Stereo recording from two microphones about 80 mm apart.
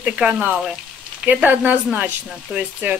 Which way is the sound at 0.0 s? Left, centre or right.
Centre.